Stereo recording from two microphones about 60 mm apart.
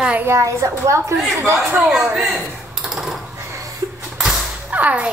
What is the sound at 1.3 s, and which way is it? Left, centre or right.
Speech, right.